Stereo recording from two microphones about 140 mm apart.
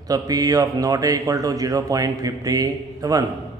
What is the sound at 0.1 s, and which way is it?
Speech, 25° right (ahead or behind).